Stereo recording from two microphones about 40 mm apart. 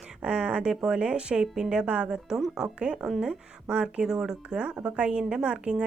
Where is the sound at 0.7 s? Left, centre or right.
Centre.